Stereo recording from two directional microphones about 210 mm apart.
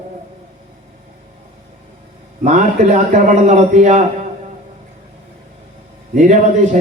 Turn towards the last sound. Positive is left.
turn(degrees=-35)  # may be behind; listen again after turning